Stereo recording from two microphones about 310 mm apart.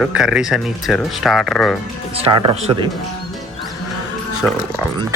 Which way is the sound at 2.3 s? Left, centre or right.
Centre.